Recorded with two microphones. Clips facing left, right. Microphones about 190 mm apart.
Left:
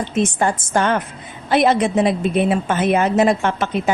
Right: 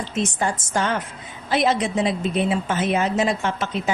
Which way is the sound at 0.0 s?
55° left (ahead or behind).